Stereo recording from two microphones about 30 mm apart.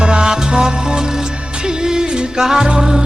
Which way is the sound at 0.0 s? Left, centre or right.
Right.